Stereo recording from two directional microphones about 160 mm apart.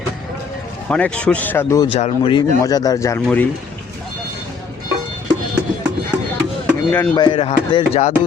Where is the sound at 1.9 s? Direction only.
35° left (ahead or behind).